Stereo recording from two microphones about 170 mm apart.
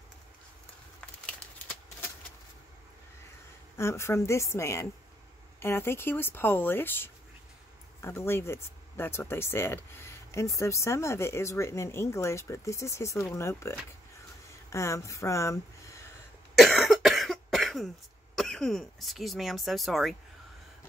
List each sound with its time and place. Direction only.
1.2 s a sound: 10° left (ahead or behind)
3.7 s speech: 15° left (ahead or behind)
16.5 s cough: centre (ahead or behind)